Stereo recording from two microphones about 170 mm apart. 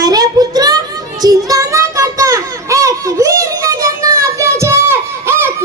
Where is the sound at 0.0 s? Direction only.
20° right (ahead or behind).